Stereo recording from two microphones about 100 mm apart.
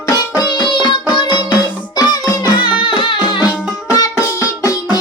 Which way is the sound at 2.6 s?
55° left (ahead or behind).